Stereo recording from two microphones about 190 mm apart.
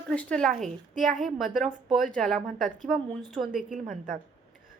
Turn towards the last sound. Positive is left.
turn(degrees=-45)  # may be behind; listen again after turning